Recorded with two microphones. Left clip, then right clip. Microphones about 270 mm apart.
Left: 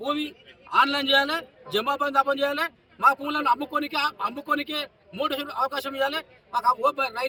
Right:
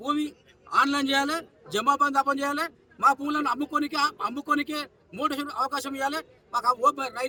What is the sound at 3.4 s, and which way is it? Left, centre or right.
A man's voice, centre.